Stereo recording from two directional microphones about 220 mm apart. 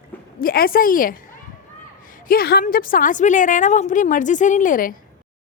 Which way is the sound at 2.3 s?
45° left (ahead or behind).